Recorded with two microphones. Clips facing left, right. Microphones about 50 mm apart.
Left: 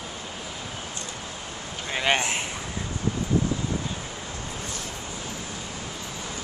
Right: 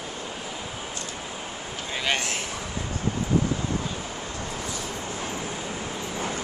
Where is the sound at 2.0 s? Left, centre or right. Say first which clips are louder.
Left 3 dB; left.